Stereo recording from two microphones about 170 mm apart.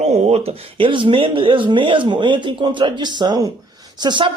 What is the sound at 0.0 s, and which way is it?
Speech, 40° right (ahead or behind).